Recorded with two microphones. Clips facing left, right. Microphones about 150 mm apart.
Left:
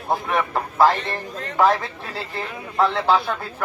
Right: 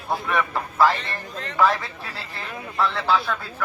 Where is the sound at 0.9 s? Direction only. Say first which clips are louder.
Left 3 dB; 45° left (ahead or behind).